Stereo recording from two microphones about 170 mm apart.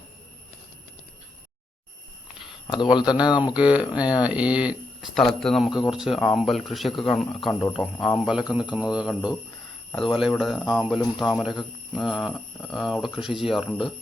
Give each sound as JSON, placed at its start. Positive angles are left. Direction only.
{"t": 2.9, "sound": "speech", "side_deg": 25}
{"t": 3.4, "sound": "speech", "side_deg": -5}